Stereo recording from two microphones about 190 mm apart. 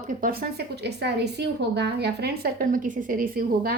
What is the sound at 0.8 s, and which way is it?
A woman's voice, 60° right (ahead or behind).